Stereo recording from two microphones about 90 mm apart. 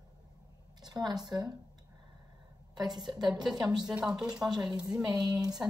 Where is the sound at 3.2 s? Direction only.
50° right (ahead or behind).